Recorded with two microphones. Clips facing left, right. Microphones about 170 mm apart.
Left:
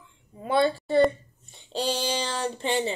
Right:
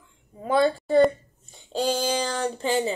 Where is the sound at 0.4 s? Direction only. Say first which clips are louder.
Right 2 dB; 40° right (ahead or behind).